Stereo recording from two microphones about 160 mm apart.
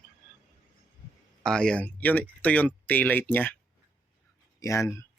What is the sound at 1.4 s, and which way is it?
Speech, 5° left (ahead or behind).